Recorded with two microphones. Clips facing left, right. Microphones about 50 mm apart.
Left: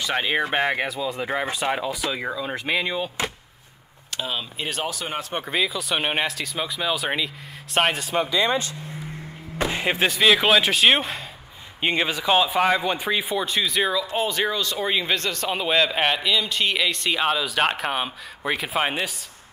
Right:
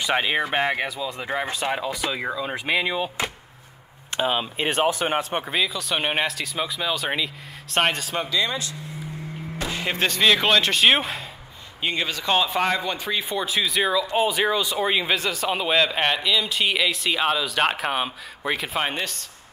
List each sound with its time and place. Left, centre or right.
0.2 s speech: centre
4.1 s speech: right
5.4 s speech: centre
8.3 s speech: left
9.6 s music: left
9.9 s speech: centre
11.8 s speech: left
12.2 s speech: centre